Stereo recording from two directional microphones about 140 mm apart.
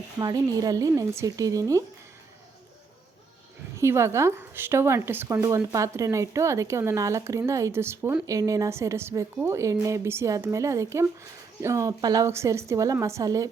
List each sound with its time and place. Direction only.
0.2 s a woman's voice: 25° right (ahead or behind)
3.8 s a woman's voice: 20° right (ahead or behind)